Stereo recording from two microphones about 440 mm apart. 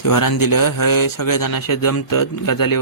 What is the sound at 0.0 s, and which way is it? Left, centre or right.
Speech, left.